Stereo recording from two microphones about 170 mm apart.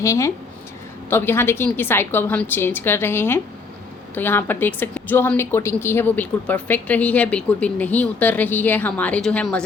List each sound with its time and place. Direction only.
0.0 s a woman's voice: 20° left (ahead or behind)